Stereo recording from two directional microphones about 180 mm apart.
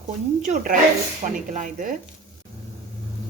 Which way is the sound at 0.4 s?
45° right (ahead or behind).